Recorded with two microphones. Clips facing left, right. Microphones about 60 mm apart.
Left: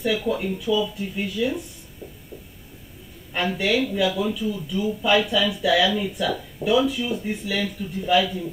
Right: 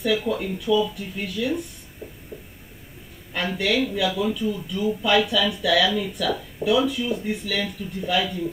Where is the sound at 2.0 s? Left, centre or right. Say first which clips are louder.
Right 1 dB; right.